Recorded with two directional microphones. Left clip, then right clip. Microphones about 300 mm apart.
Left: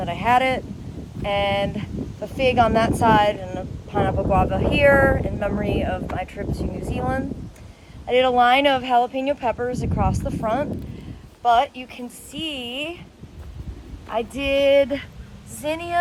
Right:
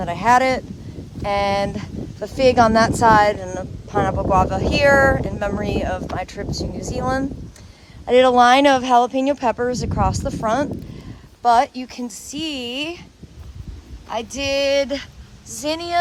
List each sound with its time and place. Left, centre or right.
0.2 s speech: centre
1.6 s speech: right
2.6 s speech: centre
8.1 s speech: centre
8.4 s speech: right
9.2 s speech: centre
11.7 s speech: right
12.3 s speech: centre
12.5 s speech: right
14.1 s speech: centre